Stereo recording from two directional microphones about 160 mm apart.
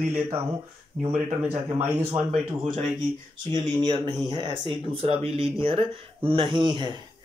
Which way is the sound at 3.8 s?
30° right (ahead or behind).